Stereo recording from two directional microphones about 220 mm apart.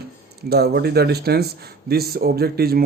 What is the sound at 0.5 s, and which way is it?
Speech, 45° right (ahead or behind).